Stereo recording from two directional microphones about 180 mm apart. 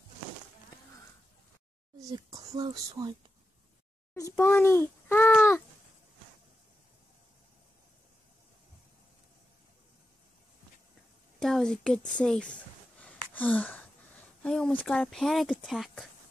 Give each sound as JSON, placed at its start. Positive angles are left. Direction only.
{"t": 2.0, "sound": "speech", "side_deg": -20}
{"t": 4.1, "sound": "a sound", "side_deg": 15}
{"t": 11.3, "sound": "a sound", "side_deg": 0}
{"t": 12.2, "sound": "speech", "side_deg": 5}
{"t": 13.3, "sound": "gasp", "side_deg": 10}
{"t": 14.4, "sound": "speech", "side_deg": 5}